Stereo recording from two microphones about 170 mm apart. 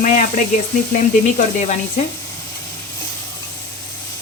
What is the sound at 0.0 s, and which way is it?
Speech, 50° left (ahead or behind).